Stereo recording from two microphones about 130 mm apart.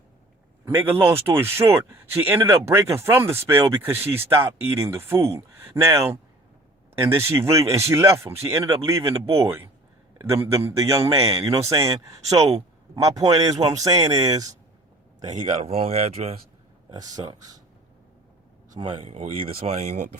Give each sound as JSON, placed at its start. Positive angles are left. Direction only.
{"t": 0.6, "sound": "speech", "side_deg": -15}
{"t": 7.2, "sound": "speech", "side_deg": -20}
{"t": 10.4, "sound": "speech", "side_deg": -20}
{"t": 15.6, "sound": "speech", "side_deg": -50}
{"t": 16.9, "sound": "speech", "side_deg": -30}
{"t": 18.8, "sound": "a man's voice", "side_deg": -40}
{"t": 19.1, "sound": "speech", "side_deg": -55}